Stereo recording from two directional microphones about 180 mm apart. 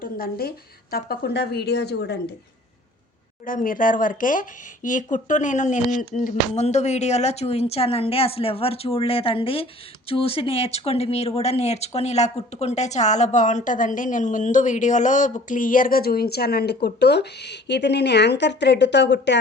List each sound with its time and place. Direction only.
0.0 s a woman's voice: 55° left (ahead or behind)
3.4 s a woman's voice: 50° left (ahead or behind); by 19.4 s 75° left (ahead or behind)